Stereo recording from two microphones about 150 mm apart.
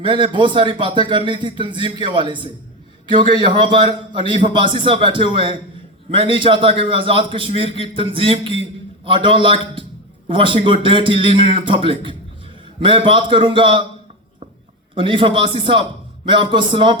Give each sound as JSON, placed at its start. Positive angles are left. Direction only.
{"t": 0.0, "sound": "a man's voice", "side_deg": -30}
{"t": 14.9, "sound": "a man's voice", "side_deg": -35}